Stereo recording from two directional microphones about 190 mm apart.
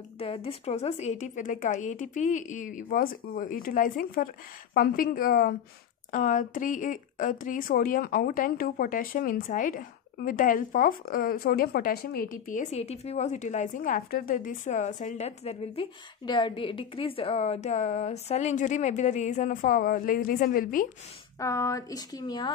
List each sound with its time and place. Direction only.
0.2 s speech: 30° left (ahead or behind); by 20.8 s 45° left (ahead or behind)
21.4 s speech: 15° left (ahead or behind)